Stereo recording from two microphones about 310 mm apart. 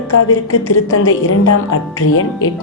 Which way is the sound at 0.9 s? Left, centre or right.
Left.